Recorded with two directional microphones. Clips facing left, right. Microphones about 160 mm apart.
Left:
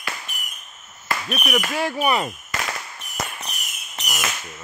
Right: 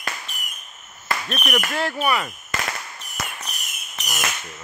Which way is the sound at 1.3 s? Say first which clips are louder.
Left 2 dB; 5° left (ahead or behind).